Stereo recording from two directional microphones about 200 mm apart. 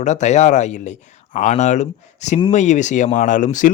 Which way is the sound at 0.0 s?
35° left (ahead or behind).